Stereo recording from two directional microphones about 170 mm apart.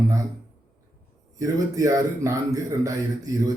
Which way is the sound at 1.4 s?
20° right (ahead or behind).